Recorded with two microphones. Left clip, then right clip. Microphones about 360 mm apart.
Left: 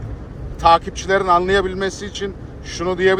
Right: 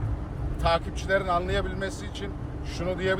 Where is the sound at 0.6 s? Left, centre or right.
Left.